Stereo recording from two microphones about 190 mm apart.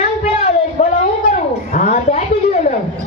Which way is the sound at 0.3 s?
35° left (ahead or behind).